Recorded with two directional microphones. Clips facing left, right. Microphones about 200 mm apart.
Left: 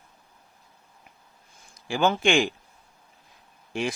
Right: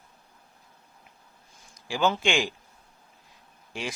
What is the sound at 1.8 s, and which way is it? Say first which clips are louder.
Speech: left 3 dB; 55° left (ahead or behind).